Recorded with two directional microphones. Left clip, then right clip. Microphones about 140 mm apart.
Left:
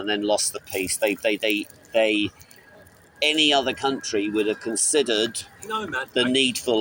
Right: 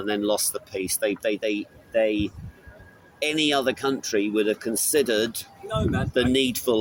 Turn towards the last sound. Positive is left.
turn(degrees=-45)  # may be behind; listen again after turning